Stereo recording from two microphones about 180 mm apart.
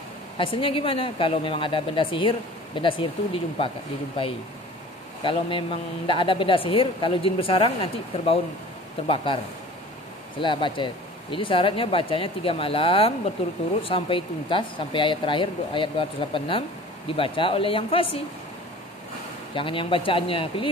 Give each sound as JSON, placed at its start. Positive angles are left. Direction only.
{"t": 0.4, "sound": "a man's voice", "side_deg": 30}
{"t": 5.2, "sound": "a man's voice", "side_deg": 25}
{"t": 10.4, "sound": "a man's voice", "side_deg": 25}
{"t": 19.5, "sound": "a man's voice", "side_deg": 30}